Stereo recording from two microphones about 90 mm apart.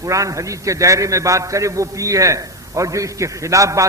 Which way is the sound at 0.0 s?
40° right (ahead or behind).